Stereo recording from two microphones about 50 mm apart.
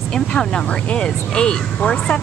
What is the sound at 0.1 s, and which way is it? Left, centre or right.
Speech, centre.